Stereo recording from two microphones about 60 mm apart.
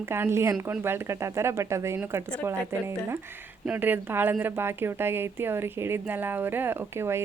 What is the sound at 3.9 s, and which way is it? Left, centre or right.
Speech, right.